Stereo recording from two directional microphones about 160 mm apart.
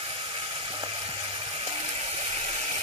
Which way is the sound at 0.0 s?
35° right (ahead or behind).